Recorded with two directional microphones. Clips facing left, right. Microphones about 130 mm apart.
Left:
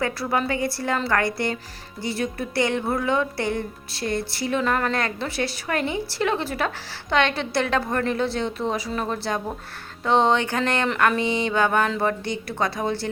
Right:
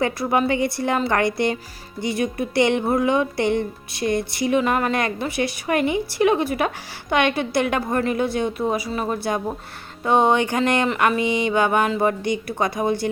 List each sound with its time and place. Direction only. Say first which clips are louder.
0.0 s a woman's voice: right 4 dB; 20° right (ahead or behind)